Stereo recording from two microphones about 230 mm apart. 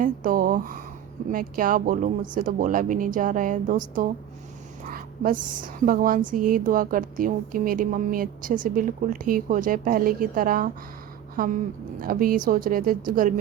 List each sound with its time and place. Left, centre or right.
0.0 s a woman's voice: right